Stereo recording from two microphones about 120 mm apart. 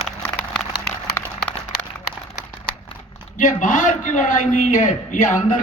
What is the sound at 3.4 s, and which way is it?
A man's voice, 90° left.